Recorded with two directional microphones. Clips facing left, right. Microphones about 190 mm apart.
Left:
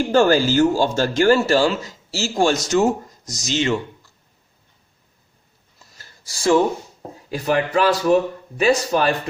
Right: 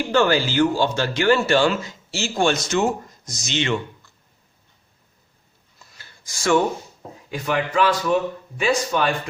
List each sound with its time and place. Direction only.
0.0 s speech: 45° left (ahead or behind)
5.8 s a sound: 35° left (ahead or behind)
7.3 s speech: 35° left (ahead or behind)